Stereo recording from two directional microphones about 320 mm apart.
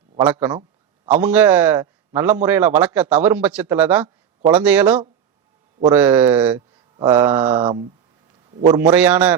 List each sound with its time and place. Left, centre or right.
0.2 s mantra: centre
1.2 s a man's voice: centre
6.9 s mantra: centre
7.4 s a man's voice: right; by 9.3 s centre